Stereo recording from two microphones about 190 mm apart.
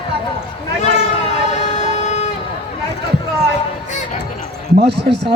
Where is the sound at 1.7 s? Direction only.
40° left (ahead or behind).